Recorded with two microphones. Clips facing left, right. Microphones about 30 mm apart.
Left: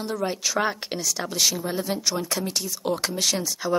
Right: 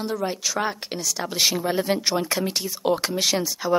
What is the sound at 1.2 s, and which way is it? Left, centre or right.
Speech, right.